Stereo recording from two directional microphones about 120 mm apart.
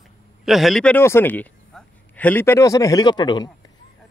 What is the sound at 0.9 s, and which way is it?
A man's voice, 20° left (ahead or behind).